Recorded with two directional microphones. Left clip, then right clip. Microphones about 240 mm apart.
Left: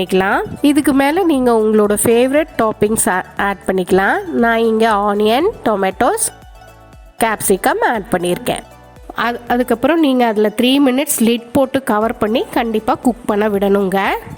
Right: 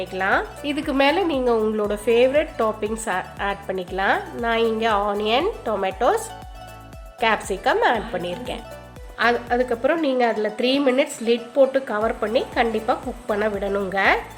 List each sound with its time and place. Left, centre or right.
0.0 s speech: left